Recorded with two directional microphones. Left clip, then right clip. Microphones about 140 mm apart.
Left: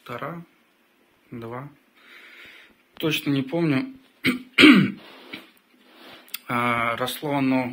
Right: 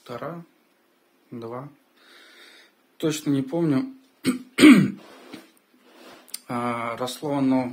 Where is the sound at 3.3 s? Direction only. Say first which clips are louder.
Even; 30° right (ahead or behind).